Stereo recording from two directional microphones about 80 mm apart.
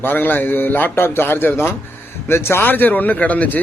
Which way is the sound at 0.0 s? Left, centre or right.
Left.